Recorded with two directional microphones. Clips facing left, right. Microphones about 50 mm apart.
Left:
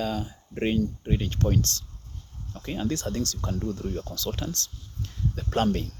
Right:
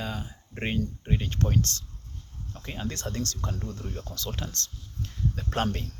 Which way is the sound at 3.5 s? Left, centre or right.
Centre.